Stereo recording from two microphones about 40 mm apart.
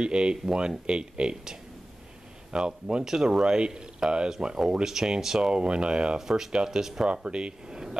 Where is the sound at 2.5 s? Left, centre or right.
Right.